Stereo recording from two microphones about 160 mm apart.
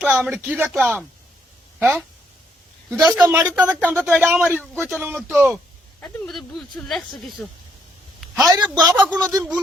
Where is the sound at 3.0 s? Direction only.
20° right (ahead or behind).